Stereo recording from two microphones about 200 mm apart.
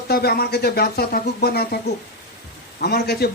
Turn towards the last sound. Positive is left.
turn(degrees=50)  # may be behind; listen again after turning